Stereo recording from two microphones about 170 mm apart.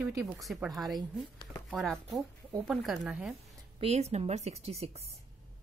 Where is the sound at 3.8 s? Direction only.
40° right (ahead or behind).